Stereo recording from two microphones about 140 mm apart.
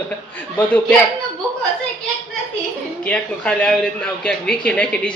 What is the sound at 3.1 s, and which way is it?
Speech, 5° left (ahead or behind).